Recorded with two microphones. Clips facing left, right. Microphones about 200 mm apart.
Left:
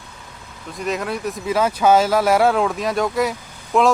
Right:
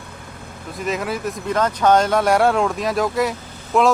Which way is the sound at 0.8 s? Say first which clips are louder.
Even; centre (ahead or behind).